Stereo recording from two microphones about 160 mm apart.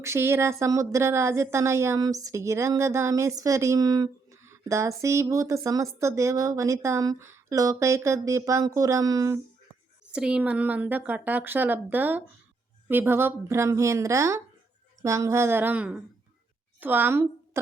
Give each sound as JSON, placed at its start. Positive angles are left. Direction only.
{"t": 0.0, "sound": "a woman's voice", "side_deg": -15}
{"t": 10.1, "sound": "a woman's voice", "side_deg": -5}